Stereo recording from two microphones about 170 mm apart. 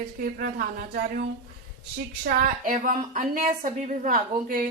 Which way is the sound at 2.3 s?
65° right (ahead or behind).